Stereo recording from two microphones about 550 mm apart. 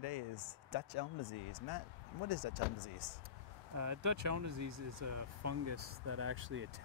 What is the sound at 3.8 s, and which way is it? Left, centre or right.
Speech, right.